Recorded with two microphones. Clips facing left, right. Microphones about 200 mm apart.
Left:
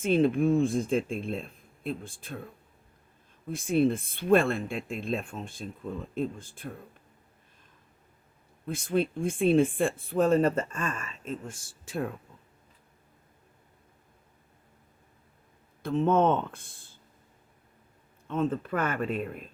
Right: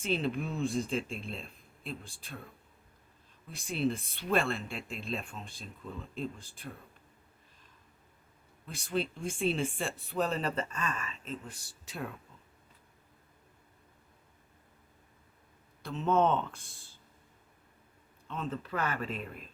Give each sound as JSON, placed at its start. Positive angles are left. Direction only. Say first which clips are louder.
{"t": 0.0, "sound": "speech", "louder": "left 9 dB", "side_deg": 50}
{"t": 8.6, "sound": "speech", "louder": "left 6 dB", "side_deg": 50}
{"t": 15.8, "sound": "speech", "louder": "left 4 dB", "side_deg": 55}
{"t": 18.3, "sound": "speech", "louder": "left 9 dB", "side_deg": 50}